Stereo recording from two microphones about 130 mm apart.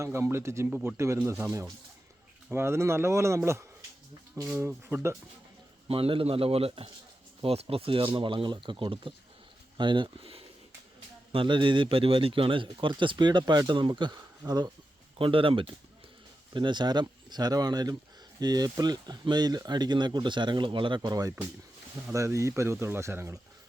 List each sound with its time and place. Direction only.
0.0 s speech: 20° right (ahead or behind)
5.9 s a man's voice: 45° right (ahead or behind)
15.2 s a man's voice: 45° right (ahead or behind); by 23.4 s 20° right (ahead or behind)